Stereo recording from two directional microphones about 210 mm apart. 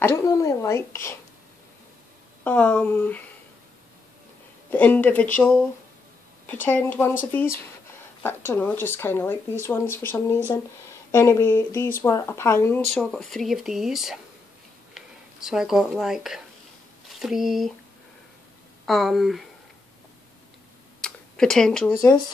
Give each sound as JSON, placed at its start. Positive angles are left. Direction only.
{"t": 0.0, "sound": "speech", "side_deg": 15}
{"t": 2.4, "sound": "speech", "side_deg": 5}
{"t": 4.6, "sound": "speech", "side_deg": 10}
{"t": 6.4, "sound": "speech", "side_deg": 10}
{"t": 18.9, "sound": "speech", "side_deg": 0}
{"t": 21.0, "sound": "a sound", "side_deg": 5}
{"t": 21.9, "sound": "speech", "side_deg": 15}